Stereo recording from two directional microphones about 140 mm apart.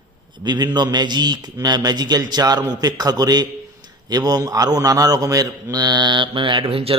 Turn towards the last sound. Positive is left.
turn(degrees=-40)  # may be behind; listen again after turning